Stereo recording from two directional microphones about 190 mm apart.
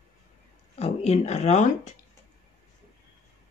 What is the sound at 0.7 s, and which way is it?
Speech, 35° left (ahead or behind).